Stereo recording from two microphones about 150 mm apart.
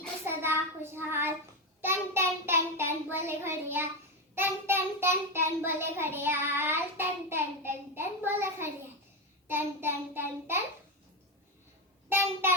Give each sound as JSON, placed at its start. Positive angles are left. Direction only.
{"t": 0.3, "sound": "child singing", "side_deg": -15}
{"t": 12.0, "sound": "child singing", "side_deg": -15}